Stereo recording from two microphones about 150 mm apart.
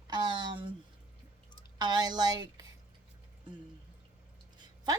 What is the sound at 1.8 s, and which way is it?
Speech, 30° right (ahead or behind).